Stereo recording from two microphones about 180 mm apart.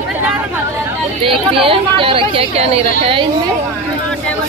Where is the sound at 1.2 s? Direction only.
30° right (ahead or behind).